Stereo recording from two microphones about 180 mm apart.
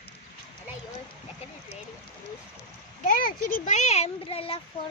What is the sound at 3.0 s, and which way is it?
Speech, 50° left (ahead or behind).